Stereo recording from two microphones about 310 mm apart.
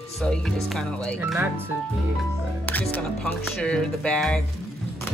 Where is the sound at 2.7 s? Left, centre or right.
Centre.